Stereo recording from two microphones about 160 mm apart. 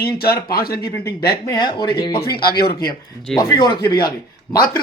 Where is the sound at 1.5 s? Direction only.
30° left (ahead or behind).